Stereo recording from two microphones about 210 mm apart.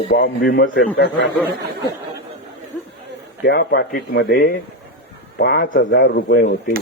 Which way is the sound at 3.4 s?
50° left (ahead or behind).